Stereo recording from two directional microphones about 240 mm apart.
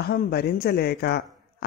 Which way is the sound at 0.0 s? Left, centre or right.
Left.